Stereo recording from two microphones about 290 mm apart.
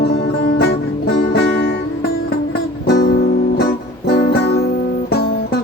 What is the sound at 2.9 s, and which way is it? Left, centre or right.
Music, left.